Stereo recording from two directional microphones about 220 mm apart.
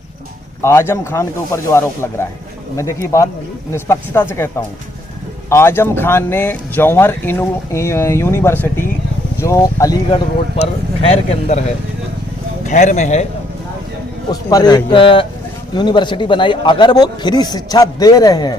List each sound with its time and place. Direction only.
0.6 s speech: 10° left (ahead or behind)
10.6 s speech: 30° left (ahead or behind)
12.6 s speech: 35° left (ahead or behind)
14.3 s speech: 20° left (ahead or behind)